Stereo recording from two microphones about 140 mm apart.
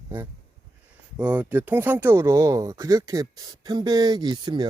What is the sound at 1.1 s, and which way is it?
Speech, 10° right (ahead or behind).